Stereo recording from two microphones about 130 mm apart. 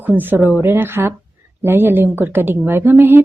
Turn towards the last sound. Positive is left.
turn(degrees=-15)  # may be behind; listen again after turning